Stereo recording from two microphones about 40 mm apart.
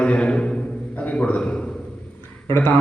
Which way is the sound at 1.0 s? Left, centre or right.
Left.